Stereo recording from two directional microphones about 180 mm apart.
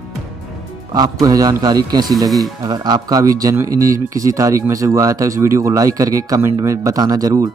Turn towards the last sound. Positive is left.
turn(degrees=-20)  # may be behind; listen again after turning